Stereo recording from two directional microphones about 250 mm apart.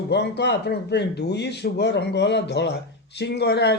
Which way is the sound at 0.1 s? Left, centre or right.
Left.